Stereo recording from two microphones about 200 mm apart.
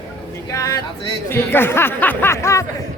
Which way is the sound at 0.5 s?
15° left (ahead or behind).